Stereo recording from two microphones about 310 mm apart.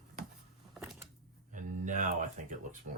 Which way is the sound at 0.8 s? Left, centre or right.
Centre.